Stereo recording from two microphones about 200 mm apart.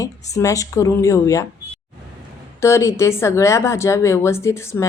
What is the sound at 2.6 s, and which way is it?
A woman's voice, 15° left (ahead or behind).